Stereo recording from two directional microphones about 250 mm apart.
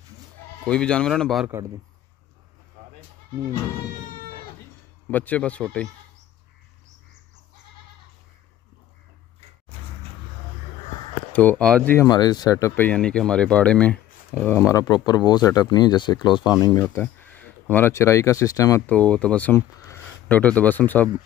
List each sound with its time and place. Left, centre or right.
0.7 s speech: centre
5.1 s speech: centre
11.3 s speech: centre